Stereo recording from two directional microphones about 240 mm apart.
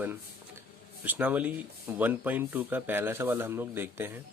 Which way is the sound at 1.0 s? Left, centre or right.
Centre.